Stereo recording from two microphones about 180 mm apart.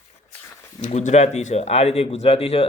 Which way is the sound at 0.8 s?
40° left (ahead or behind).